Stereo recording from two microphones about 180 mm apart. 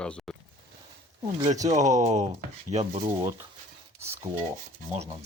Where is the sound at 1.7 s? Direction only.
40° right (ahead or behind).